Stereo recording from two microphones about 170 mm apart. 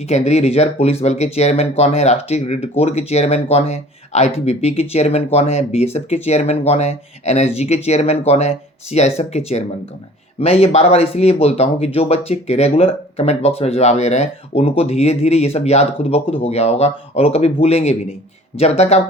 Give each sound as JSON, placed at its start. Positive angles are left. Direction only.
{"t": 0.1, "sound": "speech", "side_deg": 40}